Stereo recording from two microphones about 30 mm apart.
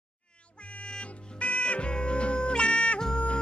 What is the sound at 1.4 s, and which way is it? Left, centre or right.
Music, left.